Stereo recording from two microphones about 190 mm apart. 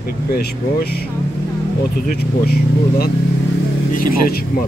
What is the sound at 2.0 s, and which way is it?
Speech, 55° left (ahead or behind).